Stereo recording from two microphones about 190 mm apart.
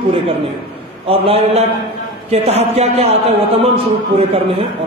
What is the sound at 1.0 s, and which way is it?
A man's voice, 30° right (ahead or behind).